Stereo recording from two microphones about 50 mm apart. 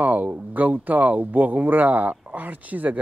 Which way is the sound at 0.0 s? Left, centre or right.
Right.